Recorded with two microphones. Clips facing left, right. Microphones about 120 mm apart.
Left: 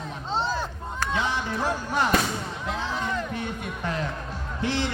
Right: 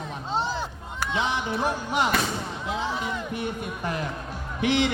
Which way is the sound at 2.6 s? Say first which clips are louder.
Even; 10° right (ahead or behind).